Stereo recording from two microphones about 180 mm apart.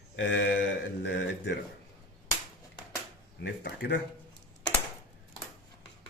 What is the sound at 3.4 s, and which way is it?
Speech, 65° left (ahead or behind).